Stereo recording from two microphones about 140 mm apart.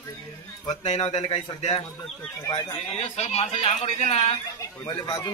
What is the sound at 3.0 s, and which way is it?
Speech, 50° left (ahead or behind).